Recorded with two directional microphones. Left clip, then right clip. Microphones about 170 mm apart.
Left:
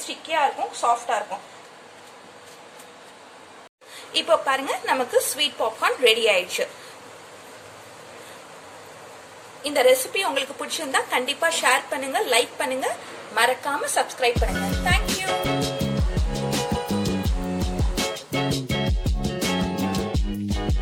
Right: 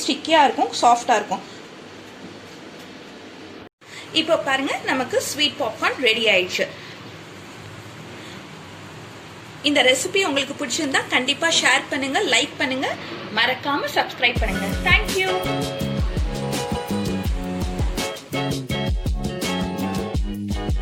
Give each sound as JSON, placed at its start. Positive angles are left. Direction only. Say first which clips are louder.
{"t": 0.3, "sound": "a woman's voice", "louder": "right 6 dB", "side_deg": -55}
{"t": 4.1, "sound": "a woman's voice", "louder": "right 1 dB", "side_deg": 55}
{"t": 9.6, "sound": "a woman's voice", "louder": "right 1 dB", "side_deg": 45}
{"t": 14.4, "sound": "music", "louder": "right 2 dB", "side_deg": 0}